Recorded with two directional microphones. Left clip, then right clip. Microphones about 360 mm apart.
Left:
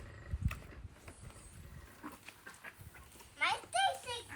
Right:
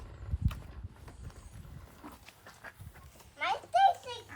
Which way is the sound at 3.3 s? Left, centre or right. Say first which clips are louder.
Right 5 dB; centre.